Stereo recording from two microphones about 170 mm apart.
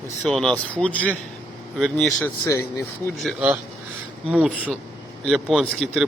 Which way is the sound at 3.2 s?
5° right (ahead or behind).